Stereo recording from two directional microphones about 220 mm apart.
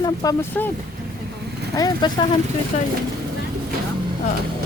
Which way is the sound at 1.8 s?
20° left (ahead or behind).